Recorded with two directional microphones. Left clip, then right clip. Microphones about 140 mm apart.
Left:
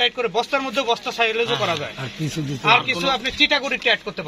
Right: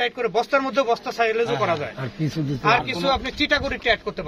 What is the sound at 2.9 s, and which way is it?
Speech, 20° right (ahead or behind).